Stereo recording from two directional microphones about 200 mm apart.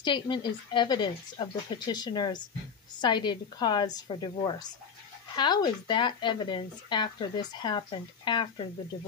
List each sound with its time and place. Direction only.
0.0 s speech: 25° left (ahead or behind)